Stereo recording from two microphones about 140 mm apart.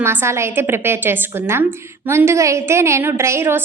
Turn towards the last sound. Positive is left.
turn(degrees=-15)  # may be behind; listen again after turning